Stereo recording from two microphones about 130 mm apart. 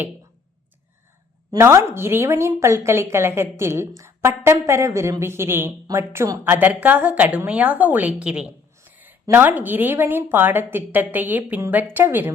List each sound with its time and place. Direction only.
1.5 s a woman's voice: 20° right (ahead or behind)
8.8 s a sound: 15° right (ahead or behind)
9.3 s a woman's voice: 15° right (ahead or behind)